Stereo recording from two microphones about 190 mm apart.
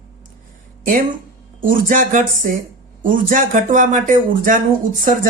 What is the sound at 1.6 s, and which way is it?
Speech, 45° right (ahead or behind).